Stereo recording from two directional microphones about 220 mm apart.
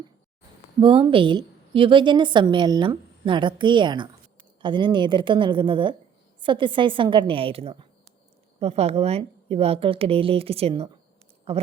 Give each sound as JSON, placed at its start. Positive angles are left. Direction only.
{"t": 0.8, "sound": "a woman's voice", "side_deg": -25}